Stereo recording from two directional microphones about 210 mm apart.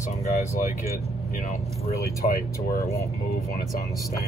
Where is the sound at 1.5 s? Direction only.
45° left (ahead or behind).